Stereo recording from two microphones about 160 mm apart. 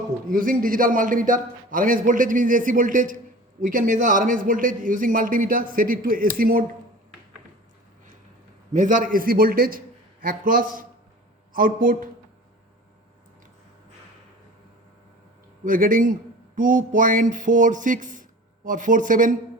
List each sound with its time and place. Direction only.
0.3 s a man's voice: 60° right (ahead or behind)
8.7 s a man's voice: 55° right (ahead or behind)
15.6 s a man's voice: 60° right (ahead or behind)